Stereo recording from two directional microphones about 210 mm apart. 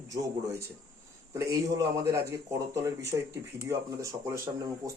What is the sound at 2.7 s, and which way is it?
Speech, 15° right (ahead or behind).